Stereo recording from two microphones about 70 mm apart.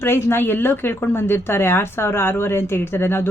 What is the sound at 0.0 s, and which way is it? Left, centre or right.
Speech, left.